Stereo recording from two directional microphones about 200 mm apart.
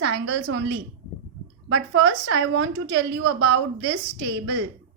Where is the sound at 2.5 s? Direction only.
60° right (ahead or behind).